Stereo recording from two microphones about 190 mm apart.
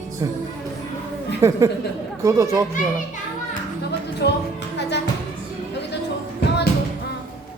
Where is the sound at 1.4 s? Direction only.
15° right (ahead or behind).